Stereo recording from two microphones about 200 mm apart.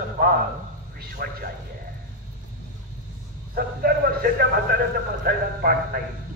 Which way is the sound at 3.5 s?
50° right (ahead or behind).